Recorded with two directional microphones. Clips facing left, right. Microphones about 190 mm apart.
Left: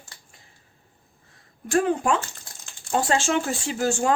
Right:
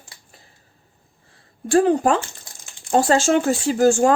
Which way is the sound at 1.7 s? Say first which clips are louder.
Right 5 dB; 35° right (ahead or behind).